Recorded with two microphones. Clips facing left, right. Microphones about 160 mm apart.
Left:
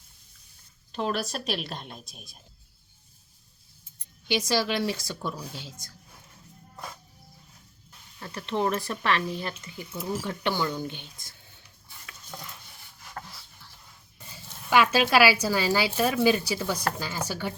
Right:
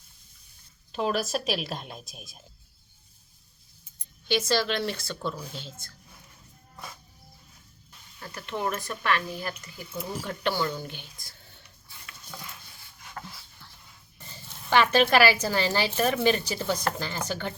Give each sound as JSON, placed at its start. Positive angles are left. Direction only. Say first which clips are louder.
{"t": 0.9, "sound": "a woman's voice", "louder": "right 2 dB", "side_deg": -5}
{"t": 4.3, "sound": "speech", "louder": "even", "side_deg": 15}
{"t": 8.2, "sound": "speech", "louder": "left 4 dB", "side_deg": 30}
{"t": 10.2, "sound": "speech", "louder": "right 2 dB", "side_deg": 15}
{"t": 14.3, "sound": "speech", "louder": "even", "side_deg": 10}